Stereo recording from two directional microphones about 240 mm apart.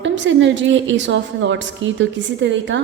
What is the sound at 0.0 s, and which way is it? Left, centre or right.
A woman's voice, right.